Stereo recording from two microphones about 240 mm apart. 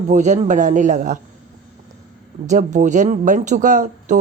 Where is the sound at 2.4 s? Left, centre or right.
Right.